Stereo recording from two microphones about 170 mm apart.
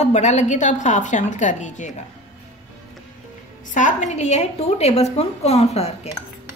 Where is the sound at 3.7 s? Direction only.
45° left (ahead or behind).